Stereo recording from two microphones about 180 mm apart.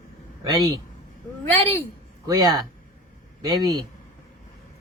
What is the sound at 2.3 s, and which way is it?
Speech, 20° right (ahead or behind).